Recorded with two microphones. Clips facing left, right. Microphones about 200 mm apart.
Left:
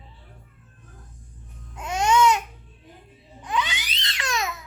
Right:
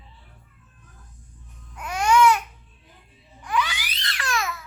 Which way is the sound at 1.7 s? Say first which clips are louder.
Right 1 dB; 25° left (ahead or behind).